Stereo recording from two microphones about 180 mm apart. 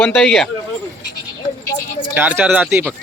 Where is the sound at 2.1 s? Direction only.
10° right (ahead or behind).